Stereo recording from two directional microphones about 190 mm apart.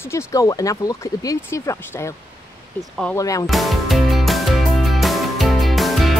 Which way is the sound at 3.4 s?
Centre (ahead or behind).